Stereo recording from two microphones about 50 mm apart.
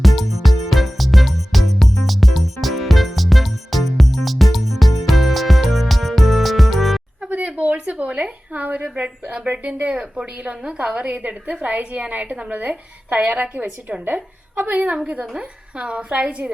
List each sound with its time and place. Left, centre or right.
0.0 s music: centre
7.4 s a sound: right
9.5 s a woman's voice: right
14.9 s a woman's voice: centre